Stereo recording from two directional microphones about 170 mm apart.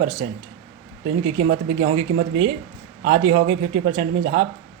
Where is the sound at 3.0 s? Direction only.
35° right (ahead or behind).